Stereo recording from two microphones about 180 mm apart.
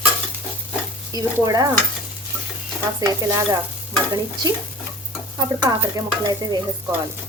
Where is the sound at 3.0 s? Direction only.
20° right (ahead or behind).